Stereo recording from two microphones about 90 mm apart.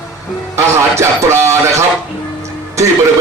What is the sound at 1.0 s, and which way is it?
Speech, 30° right (ahead or behind).